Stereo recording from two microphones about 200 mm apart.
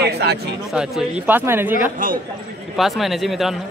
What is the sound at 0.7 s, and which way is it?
Speech, 5° right (ahead or behind).